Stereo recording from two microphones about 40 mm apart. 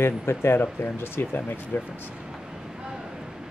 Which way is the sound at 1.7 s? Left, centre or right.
Left.